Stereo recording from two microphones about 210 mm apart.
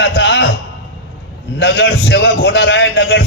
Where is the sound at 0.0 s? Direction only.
55° left (ahead or behind).